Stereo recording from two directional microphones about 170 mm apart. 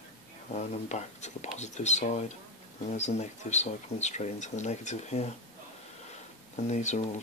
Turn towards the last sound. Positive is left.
turn(degrees=45)  # may be behind; listen again after turning